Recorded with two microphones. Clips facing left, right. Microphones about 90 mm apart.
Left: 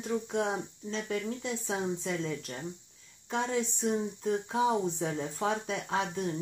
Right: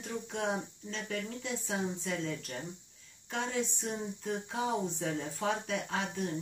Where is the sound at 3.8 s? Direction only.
30° left (ahead or behind).